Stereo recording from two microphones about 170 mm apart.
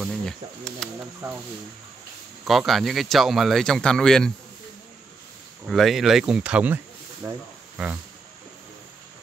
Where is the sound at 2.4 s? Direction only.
Centre (ahead or behind).